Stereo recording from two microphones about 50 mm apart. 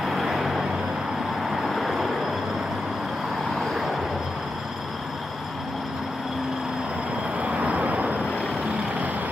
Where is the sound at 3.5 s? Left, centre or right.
Centre.